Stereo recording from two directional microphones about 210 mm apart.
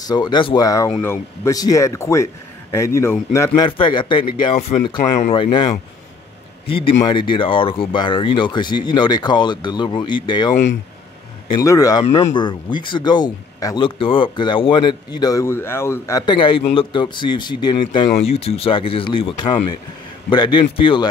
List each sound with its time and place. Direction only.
0.0 s speech: 20° left (ahead or behind)
6.7 s speech: 25° left (ahead or behind)